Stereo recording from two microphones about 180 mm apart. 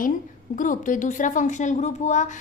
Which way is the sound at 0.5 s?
45° left (ahead or behind).